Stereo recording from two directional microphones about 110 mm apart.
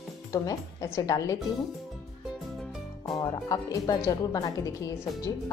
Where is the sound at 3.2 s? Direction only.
35° left (ahead or behind).